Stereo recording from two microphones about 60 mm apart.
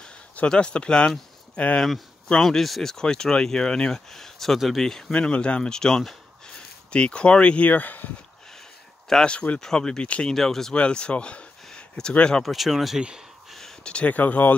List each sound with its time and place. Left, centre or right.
0.5 s speech: centre
2.2 s speech: centre
5.1 s speech: centre
9.1 s speech: centre
10.3 s speech: centre
10.7 s speech: centre
12.4 s speech: centre
13.8 s speech: left